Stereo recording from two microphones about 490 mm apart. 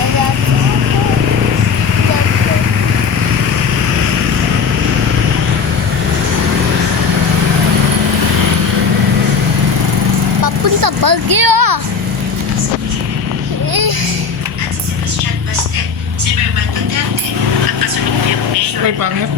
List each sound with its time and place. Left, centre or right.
10.4 s vehicle: right